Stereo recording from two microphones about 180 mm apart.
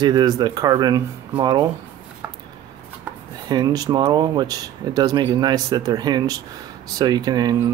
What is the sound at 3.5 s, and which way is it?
Speech, 20° right (ahead or behind).